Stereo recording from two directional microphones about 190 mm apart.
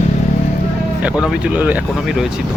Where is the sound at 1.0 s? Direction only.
5° right (ahead or behind).